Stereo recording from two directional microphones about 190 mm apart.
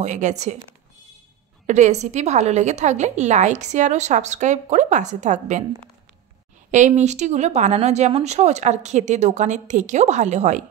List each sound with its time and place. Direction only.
0.0 s a woman's voice: 40° right (ahead or behind)
1.7 s a woman's voice: 40° right (ahead or behind)
6.7 s a woman's voice: 40° right (ahead or behind)